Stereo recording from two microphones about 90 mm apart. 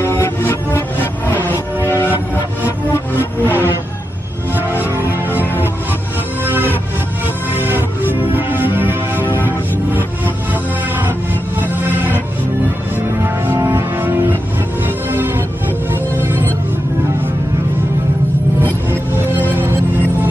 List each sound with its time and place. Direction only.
0.0 s music: 30° left (ahead or behind)
1.4 s music: 20° right (ahead or behind)
1.9 s music: 25° left (ahead or behind)
3.2 s music: 20° right (ahead or behind)
5.3 s music: 25° left (ahead or behind)
6.4 s music: 20° right (ahead or behind)
13.2 s music: 30° right (ahead or behind)
18.9 s music: 20° right (ahead or behind)